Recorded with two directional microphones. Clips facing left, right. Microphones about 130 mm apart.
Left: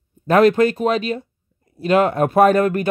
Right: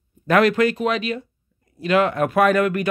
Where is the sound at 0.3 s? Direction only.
35° left (ahead or behind).